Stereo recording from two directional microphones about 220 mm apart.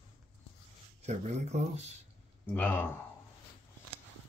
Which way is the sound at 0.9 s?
30° right (ahead or behind).